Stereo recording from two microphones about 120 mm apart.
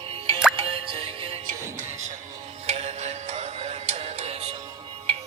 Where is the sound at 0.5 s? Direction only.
45° right (ahead or behind).